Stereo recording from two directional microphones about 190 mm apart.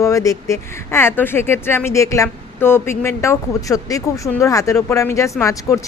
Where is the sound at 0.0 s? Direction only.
15° left (ahead or behind).